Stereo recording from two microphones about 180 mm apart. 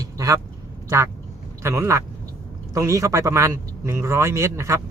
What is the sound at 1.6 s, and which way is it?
Speech, 15° right (ahead or behind).